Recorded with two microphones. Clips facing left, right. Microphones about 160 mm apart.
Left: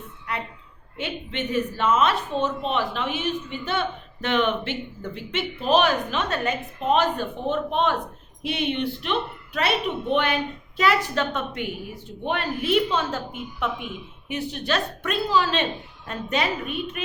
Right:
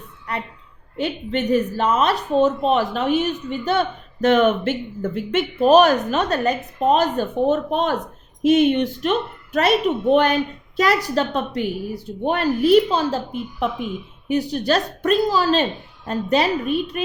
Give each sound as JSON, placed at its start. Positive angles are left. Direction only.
{"t": 0.9, "sound": "a woman's voice", "side_deg": -40}